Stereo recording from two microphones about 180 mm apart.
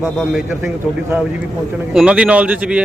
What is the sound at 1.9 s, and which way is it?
Speech, 5° right (ahead or behind).